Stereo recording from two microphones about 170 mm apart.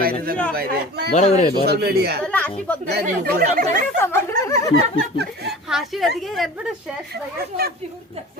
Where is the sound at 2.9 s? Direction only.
65° right (ahead or behind).